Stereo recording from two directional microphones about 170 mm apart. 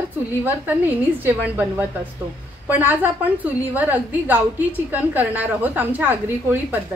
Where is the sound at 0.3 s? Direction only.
10° right (ahead or behind).